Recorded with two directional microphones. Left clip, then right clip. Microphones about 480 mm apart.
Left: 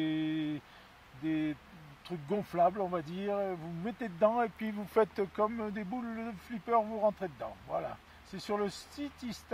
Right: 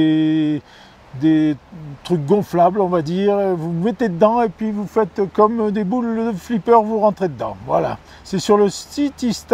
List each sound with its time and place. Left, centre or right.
0.0 s a sound: right
1.2 s speech: right
4.6 s speech: centre
5.3 s speech: right